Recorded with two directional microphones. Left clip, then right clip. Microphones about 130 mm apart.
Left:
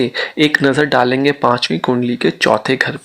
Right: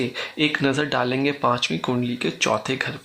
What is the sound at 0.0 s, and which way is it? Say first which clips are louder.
Speech: left 8 dB; 40° left (ahead or behind).